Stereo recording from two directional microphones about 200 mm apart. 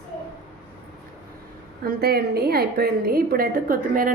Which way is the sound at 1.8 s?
50° right (ahead or behind).